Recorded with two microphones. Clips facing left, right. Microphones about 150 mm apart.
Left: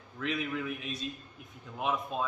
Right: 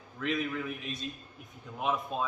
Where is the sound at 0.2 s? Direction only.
Centre (ahead or behind).